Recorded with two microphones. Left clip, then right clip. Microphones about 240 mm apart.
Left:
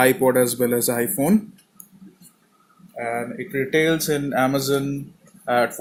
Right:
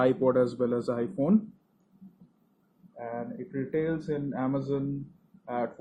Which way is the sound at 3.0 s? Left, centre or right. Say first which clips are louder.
Left 10 dB; left.